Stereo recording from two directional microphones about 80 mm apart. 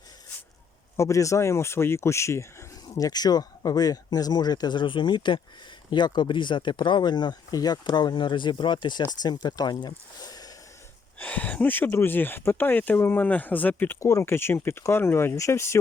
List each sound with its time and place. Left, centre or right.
0.9 s speech: left
3.1 s speech: left
9.2 s speech: left
11.2 s speech: left
14.0 s speech: left